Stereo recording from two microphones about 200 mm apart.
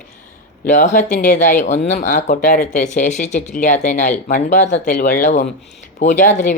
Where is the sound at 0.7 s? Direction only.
40° left (ahead or behind).